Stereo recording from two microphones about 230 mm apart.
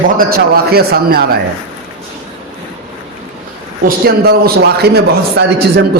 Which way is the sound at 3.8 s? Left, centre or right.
Right.